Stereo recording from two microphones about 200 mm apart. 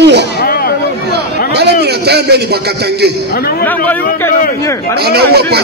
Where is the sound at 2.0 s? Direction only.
55° right (ahead or behind).